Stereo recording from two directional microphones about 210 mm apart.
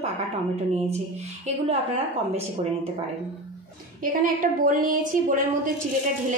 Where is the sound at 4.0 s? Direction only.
40° right (ahead or behind).